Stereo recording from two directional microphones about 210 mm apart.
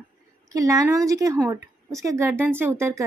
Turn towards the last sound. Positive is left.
turn(degrees=-10)  # may be behind; listen again after turning